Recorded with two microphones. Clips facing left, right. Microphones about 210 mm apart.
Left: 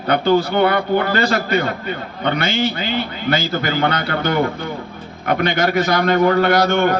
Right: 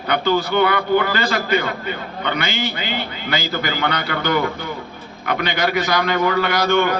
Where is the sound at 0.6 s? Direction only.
40° left (ahead or behind).